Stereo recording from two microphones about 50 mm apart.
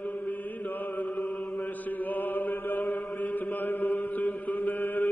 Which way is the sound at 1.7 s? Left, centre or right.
Left.